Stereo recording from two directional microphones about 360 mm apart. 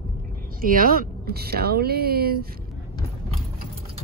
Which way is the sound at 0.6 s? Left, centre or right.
Right.